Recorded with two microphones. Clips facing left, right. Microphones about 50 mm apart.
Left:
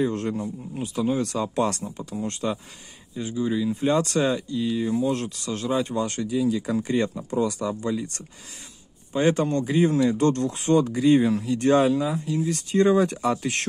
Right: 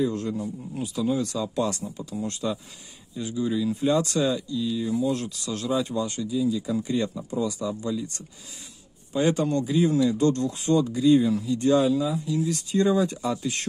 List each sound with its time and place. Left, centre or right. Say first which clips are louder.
0.0 s speech: left 1 dB; left
0.4 s speech: left 1 dB; left
3.7 s speech: left 1 dB; left
6.0 s speech: left 2 dB; left